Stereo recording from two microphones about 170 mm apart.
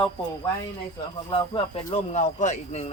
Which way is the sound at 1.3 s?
30° left (ahead or behind).